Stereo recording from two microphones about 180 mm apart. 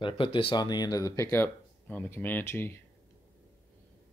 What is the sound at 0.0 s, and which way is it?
Speech, 30° left (ahead or behind).